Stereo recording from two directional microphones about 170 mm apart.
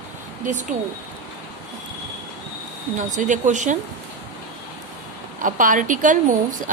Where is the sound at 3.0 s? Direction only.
45° right (ahead or behind).